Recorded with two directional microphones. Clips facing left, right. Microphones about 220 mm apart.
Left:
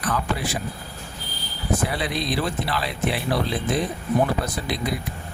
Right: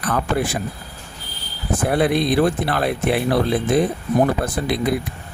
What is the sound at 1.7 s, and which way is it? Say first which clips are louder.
Speech: right 7 dB; 55° right (ahead or behind).